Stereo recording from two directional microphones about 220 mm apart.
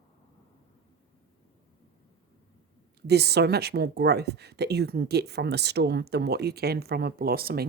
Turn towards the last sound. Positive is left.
turn(degrees=-45)  # may be behind; listen again after turning